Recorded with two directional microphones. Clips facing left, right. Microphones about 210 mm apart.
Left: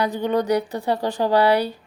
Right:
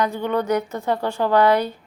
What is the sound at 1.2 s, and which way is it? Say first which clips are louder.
Speech: right 1 dB; 35° left (ahead or behind).